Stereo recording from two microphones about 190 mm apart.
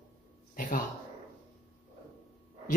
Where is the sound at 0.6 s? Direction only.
45° left (ahead or behind).